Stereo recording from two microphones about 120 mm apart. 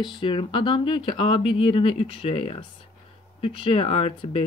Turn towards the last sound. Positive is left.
turn(degrees=50)  # may be behind; listen again after turning